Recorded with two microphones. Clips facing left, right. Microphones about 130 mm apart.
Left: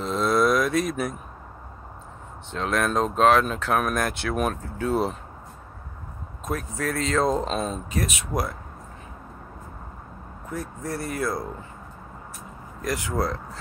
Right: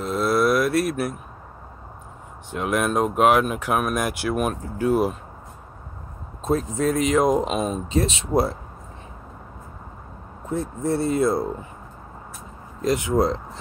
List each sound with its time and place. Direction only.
0.0 s a sound: 5° right (ahead or behind)
2.5 s speech: 10° right (ahead or behind)
6.4 s speech: 25° right (ahead or behind)
7.9 s speech: 25° right (ahead or behind)
10.5 s speech: 25° right (ahead or behind)
12.8 s speech: 20° right (ahead or behind)